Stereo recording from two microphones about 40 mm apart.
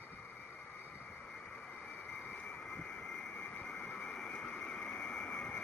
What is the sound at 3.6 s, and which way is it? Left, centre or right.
Vehicle, left.